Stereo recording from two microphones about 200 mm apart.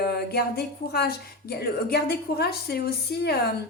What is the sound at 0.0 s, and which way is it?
A woman's voice, 50° left (ahead or behind).